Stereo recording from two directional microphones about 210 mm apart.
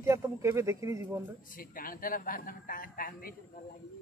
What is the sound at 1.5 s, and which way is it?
A man's voice, 40° left (ahead or behind).